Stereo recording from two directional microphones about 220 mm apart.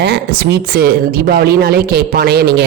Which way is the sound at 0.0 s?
50° right (ahead or behind).